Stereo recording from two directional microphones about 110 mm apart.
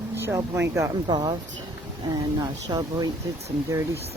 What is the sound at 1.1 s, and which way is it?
Speech, 40° right (ahead or behind).